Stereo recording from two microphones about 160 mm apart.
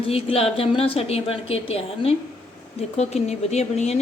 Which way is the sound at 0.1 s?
40° left (ahead or behind).